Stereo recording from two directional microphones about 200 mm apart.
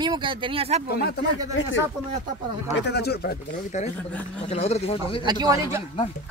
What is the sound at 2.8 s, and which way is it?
Speech, 55° left (ahead or behind).